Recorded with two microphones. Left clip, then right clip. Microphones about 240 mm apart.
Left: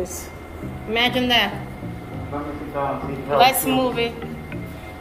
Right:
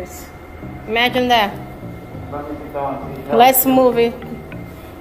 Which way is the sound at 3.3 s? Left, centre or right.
Right.